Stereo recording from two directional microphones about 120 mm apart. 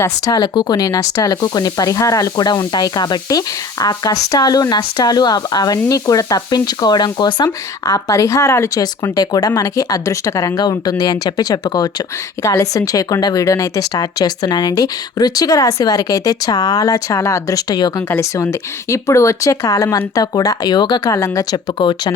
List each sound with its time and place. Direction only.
0.3 s speech: 40° left (ahead or behind)
18.1 s speech: 20° left (ahead or behind)
21.8 s speech: 40° left (ahead or behind)